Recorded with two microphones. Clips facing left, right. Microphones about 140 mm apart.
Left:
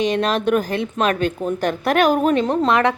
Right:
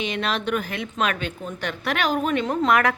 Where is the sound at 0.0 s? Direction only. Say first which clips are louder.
Left 7 dB; 40° left (ahead or behind).